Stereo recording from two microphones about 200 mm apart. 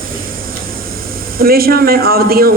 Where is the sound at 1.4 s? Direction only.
50° right (ahead or behind).